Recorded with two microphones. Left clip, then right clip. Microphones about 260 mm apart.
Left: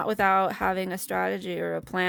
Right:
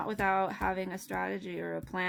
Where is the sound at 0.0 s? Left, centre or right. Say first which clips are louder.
Left 7 dB; left.